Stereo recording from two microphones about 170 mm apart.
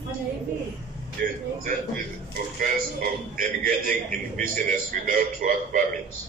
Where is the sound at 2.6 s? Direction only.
55° right (ahead or behind).